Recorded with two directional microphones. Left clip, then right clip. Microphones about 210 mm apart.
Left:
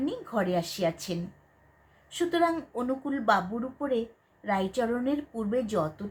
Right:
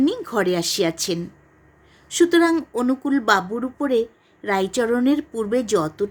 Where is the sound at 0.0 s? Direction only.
50° right (ahead or behind).